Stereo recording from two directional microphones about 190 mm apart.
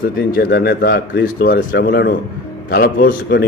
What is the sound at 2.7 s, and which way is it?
Speech, 50° left (ahead or behind).